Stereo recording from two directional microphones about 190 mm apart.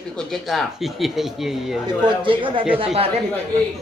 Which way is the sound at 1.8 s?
25° right (ahead or behind).